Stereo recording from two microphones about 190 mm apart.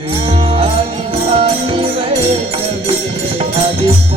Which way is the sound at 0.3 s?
30° right (ahead or behind).